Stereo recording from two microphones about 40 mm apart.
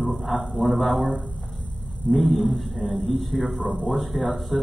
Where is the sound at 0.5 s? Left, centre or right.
Centre.